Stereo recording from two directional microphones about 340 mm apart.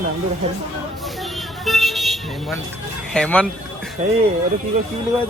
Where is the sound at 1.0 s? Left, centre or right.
Centre.